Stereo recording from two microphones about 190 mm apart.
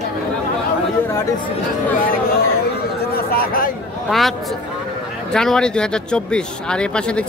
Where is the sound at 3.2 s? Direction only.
50° left (ahead or behind).